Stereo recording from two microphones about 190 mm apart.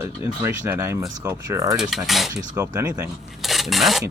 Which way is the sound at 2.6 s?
15° right (ahead or behind).